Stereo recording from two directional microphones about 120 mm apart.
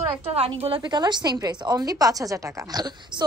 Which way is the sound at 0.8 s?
35° right (ahead or behind).